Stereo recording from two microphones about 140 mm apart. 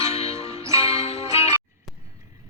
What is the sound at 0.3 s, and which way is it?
Music, 20° right (ahead or behind).